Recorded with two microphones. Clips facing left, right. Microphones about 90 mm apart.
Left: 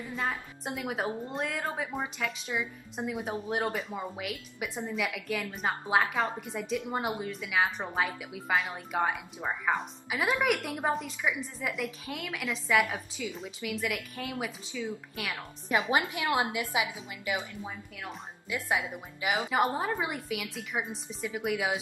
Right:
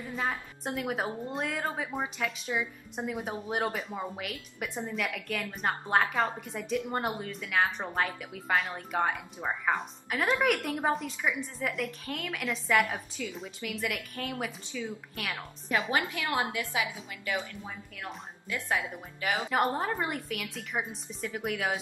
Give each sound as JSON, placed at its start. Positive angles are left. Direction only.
{"t": 0.1, "sound": "a woman's voice", "side_deg": 0}
{"t": 15.9, "sound": "a woman's voice", "side_deg": 20}
{"t": 19.5, "sound": "a woman's voice", "side_deg": 5}